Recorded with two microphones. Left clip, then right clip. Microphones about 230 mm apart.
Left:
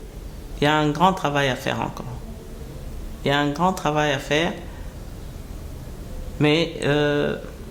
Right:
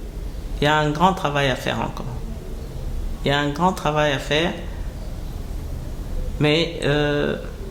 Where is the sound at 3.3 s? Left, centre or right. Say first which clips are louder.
Right 1 dB; left.